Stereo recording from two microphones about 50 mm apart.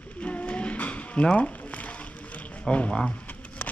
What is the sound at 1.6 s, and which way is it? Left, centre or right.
Music, left.